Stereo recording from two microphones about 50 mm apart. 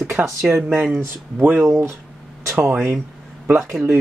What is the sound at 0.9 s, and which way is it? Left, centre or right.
Speech, right.